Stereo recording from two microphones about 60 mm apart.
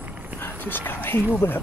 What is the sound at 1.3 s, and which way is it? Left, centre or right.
Speech, left.